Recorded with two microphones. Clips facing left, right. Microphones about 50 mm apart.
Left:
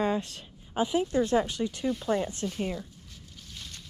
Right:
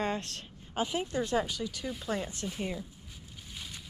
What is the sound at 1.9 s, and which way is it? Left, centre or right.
Speech, centre.